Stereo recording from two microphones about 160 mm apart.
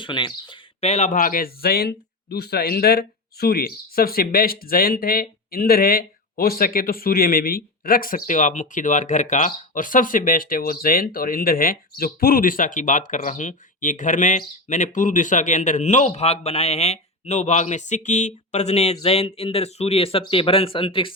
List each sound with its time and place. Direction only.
0.0 s speech: 30° left (ahead or behind)